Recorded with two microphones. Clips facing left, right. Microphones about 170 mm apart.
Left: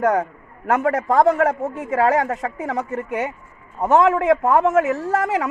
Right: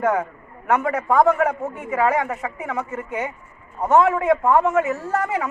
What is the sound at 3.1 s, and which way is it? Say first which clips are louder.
A man's voice: left 3 dB; 70° left (ahead or behind).